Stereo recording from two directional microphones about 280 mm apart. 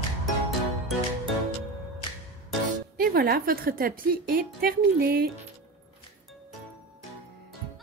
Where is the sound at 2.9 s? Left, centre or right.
Right.